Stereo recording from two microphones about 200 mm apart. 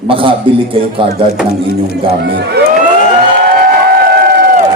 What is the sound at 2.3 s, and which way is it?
Speech, 55° right (ahead or behind).